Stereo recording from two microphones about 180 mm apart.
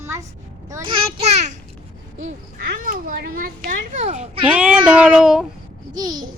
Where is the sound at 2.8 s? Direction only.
55° right (ahead or behind).